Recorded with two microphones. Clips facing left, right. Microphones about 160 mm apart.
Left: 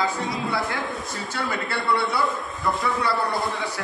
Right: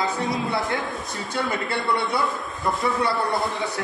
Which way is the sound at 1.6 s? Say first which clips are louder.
Even; 20° right (ahead or behind).